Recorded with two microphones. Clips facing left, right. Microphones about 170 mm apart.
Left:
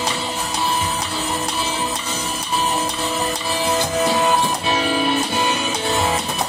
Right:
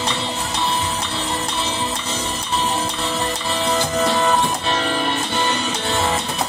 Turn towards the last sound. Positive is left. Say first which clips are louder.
# left 2 dB
turn(degrees=10)  # may be behind; listen again after turning